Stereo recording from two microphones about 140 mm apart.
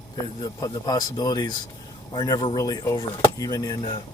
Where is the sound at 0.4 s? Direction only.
25° left (ahead or behind).